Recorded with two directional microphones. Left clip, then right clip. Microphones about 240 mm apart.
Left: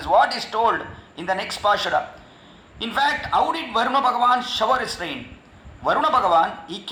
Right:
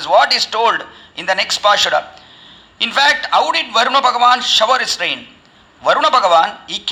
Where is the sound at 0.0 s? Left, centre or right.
Right.